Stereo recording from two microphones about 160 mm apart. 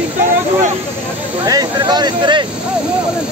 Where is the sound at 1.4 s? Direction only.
25° right (ahead or behind).